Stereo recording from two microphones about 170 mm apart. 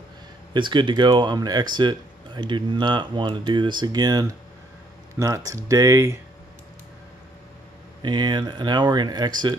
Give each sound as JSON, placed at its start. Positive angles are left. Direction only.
{"t": 0.5, "sound": "speech", "side_deg": -25}
{"t": 8.0, "sound": "speech", "side_deg": -25}